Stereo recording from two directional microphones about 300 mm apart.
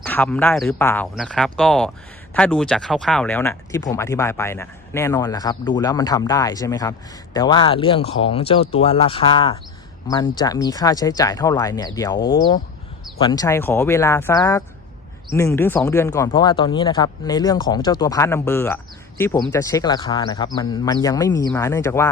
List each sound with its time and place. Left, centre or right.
0.0 s speech: centre